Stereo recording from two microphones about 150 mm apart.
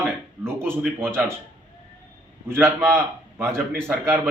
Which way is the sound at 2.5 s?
15° right (ahead or behind).